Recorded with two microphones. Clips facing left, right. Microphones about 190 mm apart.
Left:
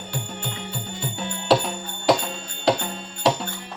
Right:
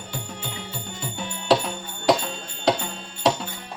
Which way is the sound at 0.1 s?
Centre (ahead or behind).